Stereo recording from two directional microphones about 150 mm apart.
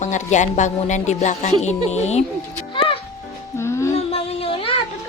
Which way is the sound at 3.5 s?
15° left (ahead or behind).